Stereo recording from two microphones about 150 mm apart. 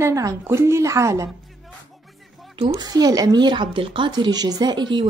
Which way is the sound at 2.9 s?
25° right (ahead or behind).